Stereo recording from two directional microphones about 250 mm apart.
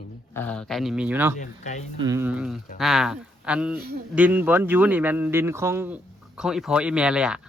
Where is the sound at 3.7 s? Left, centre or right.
Right.